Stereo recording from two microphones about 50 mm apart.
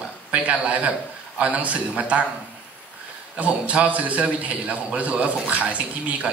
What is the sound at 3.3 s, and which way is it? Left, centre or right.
A man's voice, right.